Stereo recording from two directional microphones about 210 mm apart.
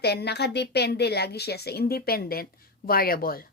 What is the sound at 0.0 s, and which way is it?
A woman's voice, 50° left (ahead or behind).